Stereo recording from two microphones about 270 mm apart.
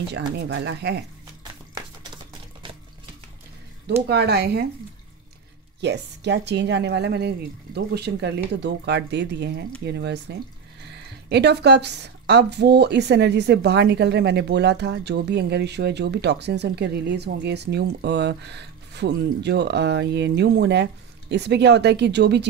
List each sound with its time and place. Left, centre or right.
0.4 s a woman's voice: right
4.1 s a woman's voice: right
5.8 s a woman's voice: right